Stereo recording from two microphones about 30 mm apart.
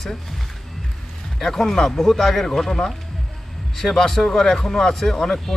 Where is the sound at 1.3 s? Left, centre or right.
Centre.